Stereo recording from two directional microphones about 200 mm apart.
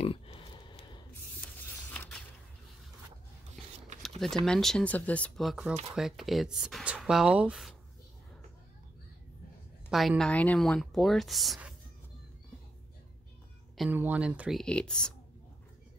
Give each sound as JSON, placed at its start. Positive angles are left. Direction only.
{"t": 0.0, "sound": "pig", "side_deg": 30}
{"t": 1.9, "sound": "a sound", "side_deg": 10}
{"t": 4.5, "sound": "speech", "side_deg": 5}
{"t": 9.8, "sound": "speech", "side_deg": 0}
{"t": 13.7, "sound": "speech", "side_deg": -10}